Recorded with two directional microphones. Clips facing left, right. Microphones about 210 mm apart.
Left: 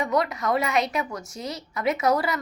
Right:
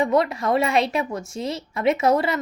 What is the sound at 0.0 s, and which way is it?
A woman's voice, 25° right (ahead or behind).